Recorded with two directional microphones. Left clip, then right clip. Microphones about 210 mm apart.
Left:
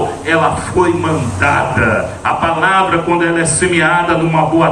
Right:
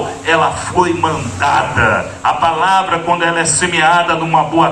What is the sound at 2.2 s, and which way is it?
Speech, 55° right (ahead or behind).